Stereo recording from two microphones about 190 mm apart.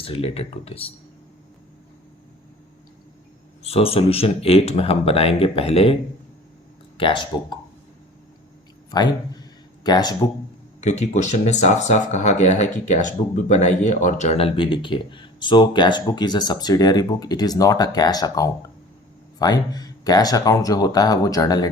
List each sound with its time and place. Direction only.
0.0 s speech: 30° left (ahead or behind)
3.6 s speech: 30° left (ahead or behind)
8.9 s speech: 20° left (ahead or behind)
10.8 s speech: 35° left (ahead or behind); by 21.7 s 20° left (ahead or behind)